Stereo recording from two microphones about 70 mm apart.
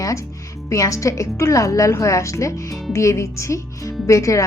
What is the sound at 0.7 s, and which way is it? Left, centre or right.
A woman's voice, left.